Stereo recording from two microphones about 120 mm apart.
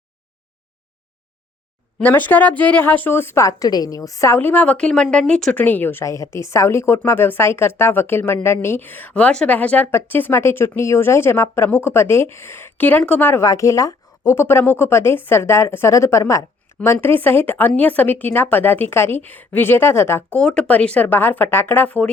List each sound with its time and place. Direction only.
2.0 s a woman's voice: 15° left (ahead or behind)
20.4 s a woman's voice: 5° left (ahead or behind)